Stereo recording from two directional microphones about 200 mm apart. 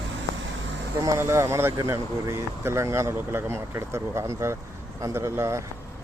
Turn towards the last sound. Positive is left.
turn(degrees=-15)  # may be behind; listen again after turning